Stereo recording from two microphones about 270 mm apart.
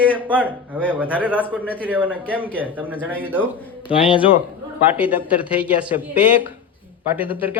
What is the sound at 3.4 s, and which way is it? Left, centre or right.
Speech, centre.